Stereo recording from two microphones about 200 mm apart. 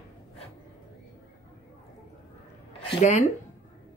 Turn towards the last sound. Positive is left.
turn(degrees=35)  # may be behind; listen again after turning